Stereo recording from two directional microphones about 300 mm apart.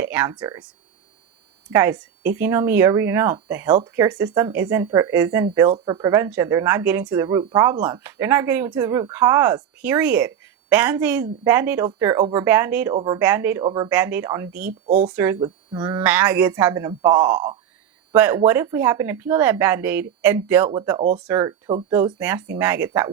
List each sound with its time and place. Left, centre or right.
0.0 s speech: centre
1.7 s speech: centre
14.7 s speech: right
15.0 s speech: centre